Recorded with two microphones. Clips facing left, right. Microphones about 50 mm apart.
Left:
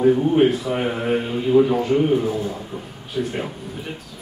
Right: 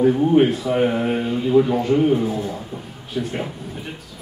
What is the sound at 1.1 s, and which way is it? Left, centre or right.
A man's voice, centre.